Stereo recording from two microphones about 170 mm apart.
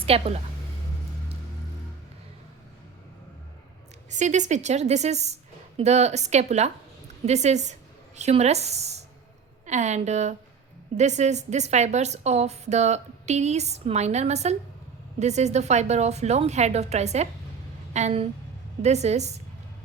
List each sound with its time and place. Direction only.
0.0 s a woman's voice: 35° right (ahead or behind)
4.1 s a woman's voice: 45° right (ahead or behind)